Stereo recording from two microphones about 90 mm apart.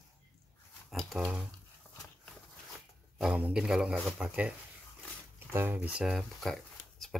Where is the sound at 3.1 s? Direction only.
5° right (ahead or behind).